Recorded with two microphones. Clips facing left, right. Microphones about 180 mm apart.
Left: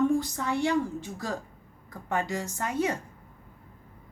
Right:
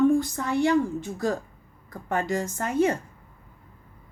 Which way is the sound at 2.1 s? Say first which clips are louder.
Right 4 dB; 50° right (ahead or behind).